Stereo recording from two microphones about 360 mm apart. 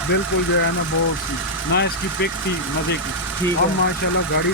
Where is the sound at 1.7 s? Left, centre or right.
Left.